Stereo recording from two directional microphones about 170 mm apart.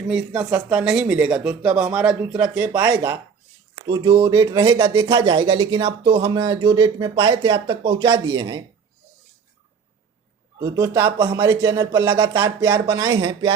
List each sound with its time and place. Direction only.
0.1 s speech: 5° right (ahead or behind)
3.8 s speech: 25° right (ahead or behind)
10.6 s speech: 15° right (ahead or behind)